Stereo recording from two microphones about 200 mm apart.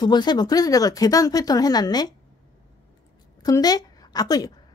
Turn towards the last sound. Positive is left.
turn(degrees=20)  # may be behind; listen again after turning